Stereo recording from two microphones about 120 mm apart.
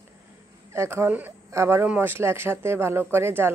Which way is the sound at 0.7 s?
20° right (ahead or behind).